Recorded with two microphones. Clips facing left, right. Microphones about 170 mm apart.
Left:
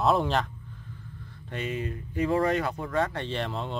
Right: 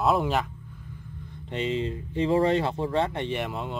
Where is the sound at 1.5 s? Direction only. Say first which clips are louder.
Right 4 dB; 25° right (ahead or behind).